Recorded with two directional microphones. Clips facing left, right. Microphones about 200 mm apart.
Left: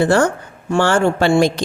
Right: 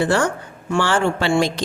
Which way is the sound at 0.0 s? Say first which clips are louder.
Left 4 dB; 45° left (ahead or behind).